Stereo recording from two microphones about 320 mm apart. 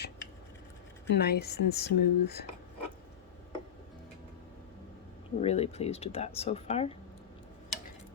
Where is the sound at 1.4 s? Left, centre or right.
Left.